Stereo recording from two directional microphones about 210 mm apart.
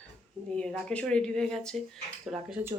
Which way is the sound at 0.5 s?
5° left (ahead or behind).